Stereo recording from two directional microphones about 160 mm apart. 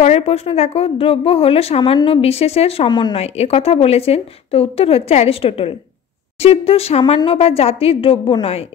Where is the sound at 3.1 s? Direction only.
40° left (ahead or behind).